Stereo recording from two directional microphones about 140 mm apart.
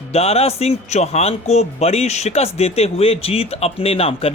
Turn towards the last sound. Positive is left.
turn(degrees=45)  # may be behind; listen again after turning